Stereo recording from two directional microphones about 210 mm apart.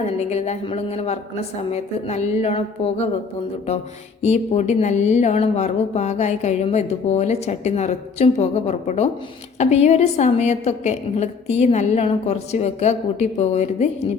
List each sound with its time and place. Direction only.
0.0 s a woman's voice: 30° left (ahead or behind)
4.2 s a woman's voice: 30° left (ahead or behind)